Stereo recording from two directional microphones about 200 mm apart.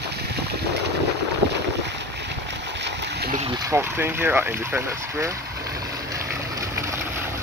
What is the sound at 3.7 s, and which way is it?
Speech, 10° right (ahead or behind).